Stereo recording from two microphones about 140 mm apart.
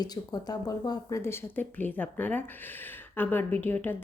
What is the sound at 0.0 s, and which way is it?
Speech, 30° left (ahead or behind).